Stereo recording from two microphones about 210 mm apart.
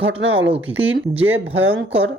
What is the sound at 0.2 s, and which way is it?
Speech, 65° right (ahead or behind).